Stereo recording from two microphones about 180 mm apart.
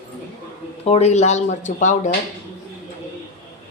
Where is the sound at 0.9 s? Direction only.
40° left (ahead or behind).